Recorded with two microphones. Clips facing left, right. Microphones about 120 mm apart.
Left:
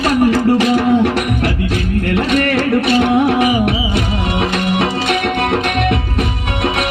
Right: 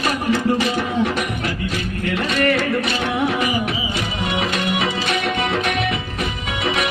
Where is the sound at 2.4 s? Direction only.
55° left (ahead or behind).